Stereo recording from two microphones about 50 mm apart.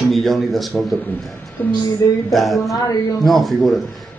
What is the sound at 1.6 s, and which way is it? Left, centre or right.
Speech, left.